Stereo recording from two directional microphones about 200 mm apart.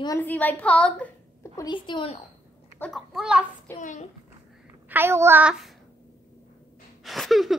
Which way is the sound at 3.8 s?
40° left (ahead or behind).